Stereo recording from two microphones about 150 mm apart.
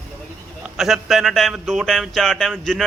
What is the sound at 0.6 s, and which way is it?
Speech, centre (ahead or behind).